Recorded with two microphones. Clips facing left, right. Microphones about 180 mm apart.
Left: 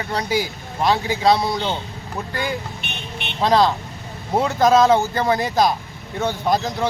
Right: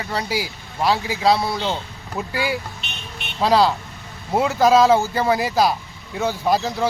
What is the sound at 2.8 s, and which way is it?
Vehicle, 60° left (ahead or behind).